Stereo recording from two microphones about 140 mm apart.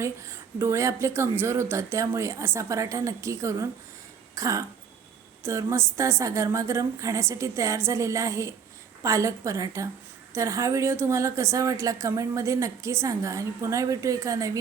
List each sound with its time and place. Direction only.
0.0 s a woman's voice: 20° right (ahead or behind)
4.4 s throat clearing: 25° right (ahead or behind)
5.4 s a woman's voice: 20° right (ahead or behind)